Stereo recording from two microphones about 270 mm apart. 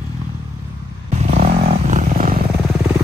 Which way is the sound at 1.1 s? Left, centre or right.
Right.